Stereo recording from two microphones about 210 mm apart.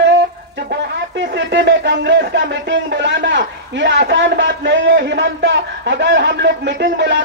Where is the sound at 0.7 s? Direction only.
55° right (ahead or behind).